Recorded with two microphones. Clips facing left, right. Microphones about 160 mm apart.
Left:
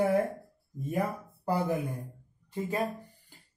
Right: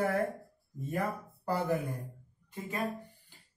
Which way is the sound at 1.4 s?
15° left (ahead or behind).